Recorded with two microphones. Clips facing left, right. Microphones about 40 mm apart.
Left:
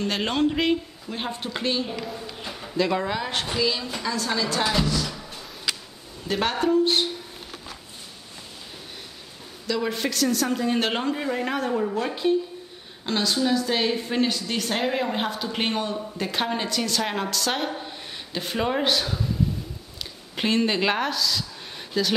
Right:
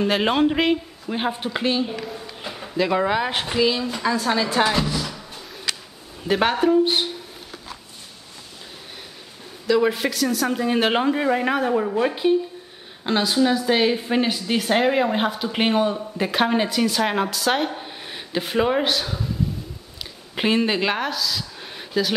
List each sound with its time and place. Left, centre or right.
0.0 s speech: centre
2.4 s a sound: centre
3.1 s a woman's voice: centre
4.8 s music: centre
6.2 s speech: centre
9.7 s speech: centre
17.7 s speech: centre
20.0 s a sound: centre